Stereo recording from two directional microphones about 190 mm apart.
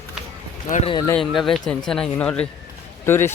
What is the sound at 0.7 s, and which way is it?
Speech, 35° left (ahead or behind).